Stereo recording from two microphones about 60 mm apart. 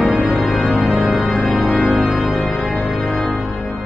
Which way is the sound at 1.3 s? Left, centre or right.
Centre.